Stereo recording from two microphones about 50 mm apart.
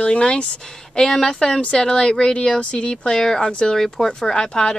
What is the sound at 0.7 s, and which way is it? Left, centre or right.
A woman's voice, centre.